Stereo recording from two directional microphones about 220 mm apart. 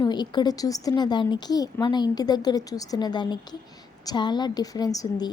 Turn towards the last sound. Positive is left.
turn(degrees=15)  # may be behind; listen again after turning